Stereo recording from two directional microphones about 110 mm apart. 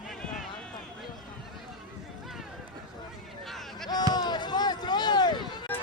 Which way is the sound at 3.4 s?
Centre (ahead or behind).